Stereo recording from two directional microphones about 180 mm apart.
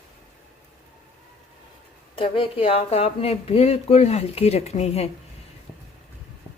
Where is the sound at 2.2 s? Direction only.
30° left (ahead or behind).